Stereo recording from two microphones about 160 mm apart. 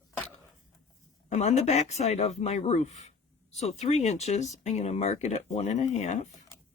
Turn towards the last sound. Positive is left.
turn(degrees=45)  # may be behind; listen again after turning